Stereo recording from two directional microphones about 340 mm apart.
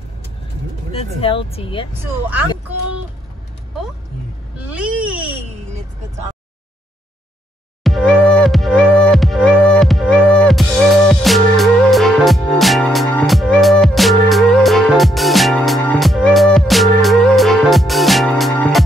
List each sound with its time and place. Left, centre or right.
0.9 s speech: centre
4.7 s baby cry: centre
7.8 s music: centre